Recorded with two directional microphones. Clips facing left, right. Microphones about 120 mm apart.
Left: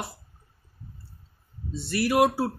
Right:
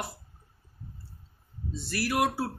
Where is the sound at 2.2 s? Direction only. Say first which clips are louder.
Left 5 dB; 20° left (ahead or behind).